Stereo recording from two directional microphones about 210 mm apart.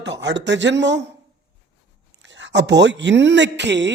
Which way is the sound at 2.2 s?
60° right (ahead or behind).